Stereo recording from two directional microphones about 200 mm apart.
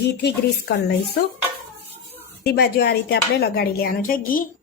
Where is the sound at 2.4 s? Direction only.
55° left (ahead or behind).